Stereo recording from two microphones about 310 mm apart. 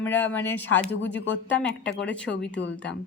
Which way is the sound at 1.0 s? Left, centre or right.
Left.